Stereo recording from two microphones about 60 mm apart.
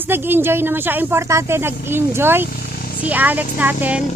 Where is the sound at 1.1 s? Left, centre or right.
Right.